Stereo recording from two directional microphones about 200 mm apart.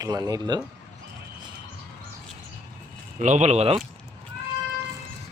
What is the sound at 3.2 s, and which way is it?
Speech, 35° right (ahead or behind).